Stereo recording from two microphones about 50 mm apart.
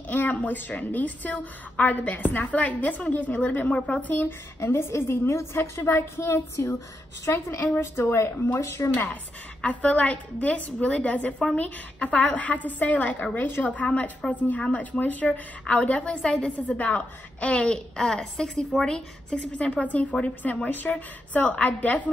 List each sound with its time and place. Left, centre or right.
0.1 s a woman's voice: left
4.6 s a woman's voice: left
7.3 s a woman's voice: left
8.5 s speech: left
8.9 s a woman's voice: left